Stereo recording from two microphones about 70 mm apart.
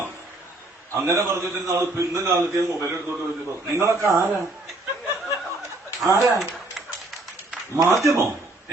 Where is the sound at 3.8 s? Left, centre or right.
Right.